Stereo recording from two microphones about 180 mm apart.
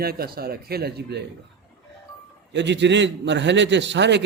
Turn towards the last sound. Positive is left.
turn(degrees=-75)  # may be behind; listen again after turning